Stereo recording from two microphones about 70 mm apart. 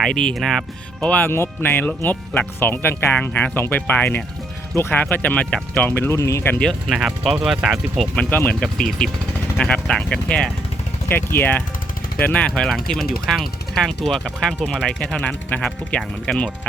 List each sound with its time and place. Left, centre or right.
0.0 s speech: centre
1.0 s speech: left
1.3 s speech: left; by 5.9 s centre
5.9 s speech: left
6.6 s speech: centre
8.1 s speech: centre
8.6 s speech: centre
11.1 s speech: left; by 12.7 s centre
12.7 s speech: centre
15.2 s speech: left
15.9 s speech: centre